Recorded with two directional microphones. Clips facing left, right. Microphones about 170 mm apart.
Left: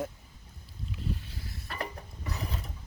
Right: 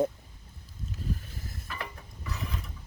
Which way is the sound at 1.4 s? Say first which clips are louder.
Right 1 dB; 50° right (ahead or behind).